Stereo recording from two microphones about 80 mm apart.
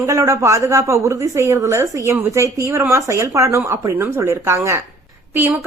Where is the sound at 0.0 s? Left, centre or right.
Right.